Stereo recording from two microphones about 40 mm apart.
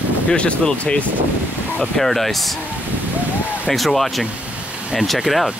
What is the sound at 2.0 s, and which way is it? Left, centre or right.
Speech, centre.